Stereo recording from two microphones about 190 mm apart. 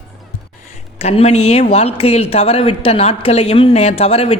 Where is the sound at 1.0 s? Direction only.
35° left (ahead or behind).